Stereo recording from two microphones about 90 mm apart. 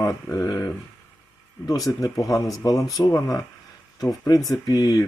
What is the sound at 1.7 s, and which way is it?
Speech, 40° left (ahead or behind).